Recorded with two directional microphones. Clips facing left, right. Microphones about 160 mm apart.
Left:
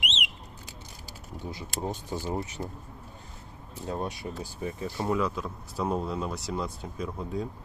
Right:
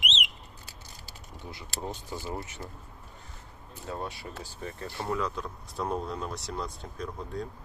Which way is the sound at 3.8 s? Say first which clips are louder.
Left 4 dB; 20° left (ahead or behind).